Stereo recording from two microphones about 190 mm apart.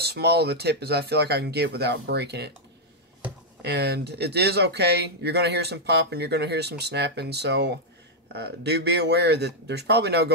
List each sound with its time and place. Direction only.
0.0 s speech: 60° right (ahead or behind)
3.6 s speech: 60° right (ahead or behind)